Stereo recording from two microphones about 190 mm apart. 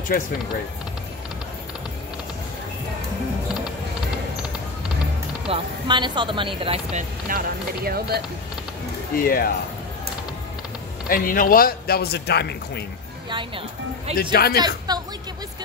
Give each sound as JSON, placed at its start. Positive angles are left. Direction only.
{"t": 0.1, "sound": "speech", "side_deg": 50}
{"t": 5.5, "sound": "speech", "side_deg": -25}
{"t": 9.1, "sound": "speech", "side_deg": 50}
{"t": 11.1, "sound": "speech", "side_deg": 50}
{"t": 13.3, "sound": "speech", "side_deg": -25}
{"t": 14.3, "sound": "speech", "side_deg": 55}
{"t": 14.9, "sound": "speech", "side_deg": -20}